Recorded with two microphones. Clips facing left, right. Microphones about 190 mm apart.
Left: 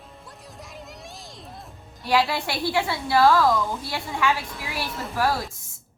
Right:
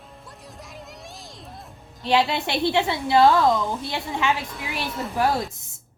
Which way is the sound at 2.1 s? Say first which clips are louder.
Right 1 dB; 20° right (ahead or behind).